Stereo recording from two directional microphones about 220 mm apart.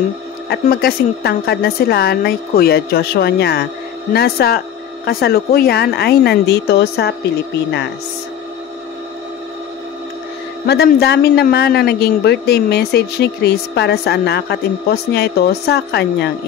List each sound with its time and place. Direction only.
0.5 s a woman's voice: 45° left (ahead or behind)
10.7 s a woman's voice: 45° left (ahead or behind)